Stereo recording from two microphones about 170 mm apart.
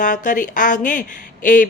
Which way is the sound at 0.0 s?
50° left (ahead or behind).